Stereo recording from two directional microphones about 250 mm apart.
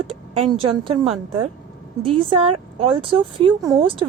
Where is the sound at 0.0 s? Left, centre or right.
Right.